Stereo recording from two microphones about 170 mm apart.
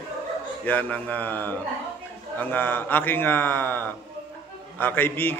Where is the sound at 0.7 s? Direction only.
10° left (ahead or behind).